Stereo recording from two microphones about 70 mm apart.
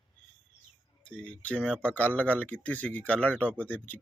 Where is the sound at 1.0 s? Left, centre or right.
Centre.